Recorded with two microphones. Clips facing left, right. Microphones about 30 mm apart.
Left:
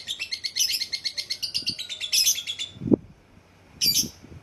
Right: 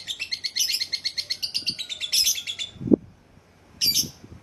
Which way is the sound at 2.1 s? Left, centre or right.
Centre.